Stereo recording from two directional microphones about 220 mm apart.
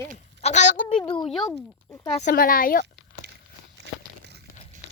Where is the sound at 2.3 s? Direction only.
40° left (ahead or behind).